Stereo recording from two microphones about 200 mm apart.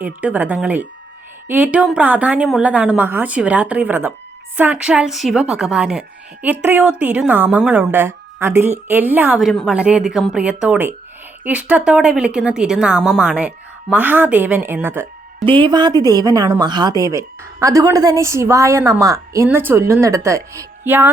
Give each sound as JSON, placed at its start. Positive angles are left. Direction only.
{"t": 0.0, "sound": "a woman's voice", "side_deg": -10}
{"t": 15.4, "sound": "a woman's voice", "side_deg": -25}